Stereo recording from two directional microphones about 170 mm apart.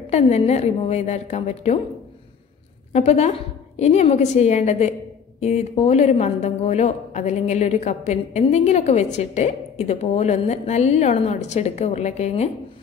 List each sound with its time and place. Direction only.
0.1 s speech: 40° left (ahead or behind)
2.9 s speech: 45° left (ahead or behind)